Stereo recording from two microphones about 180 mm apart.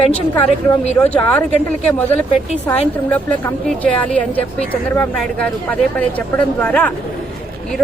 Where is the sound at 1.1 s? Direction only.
10° left (ahead or behind).